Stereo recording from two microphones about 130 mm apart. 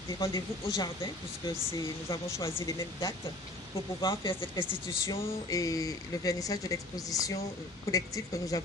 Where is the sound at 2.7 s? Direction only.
25° left (ahead or behind).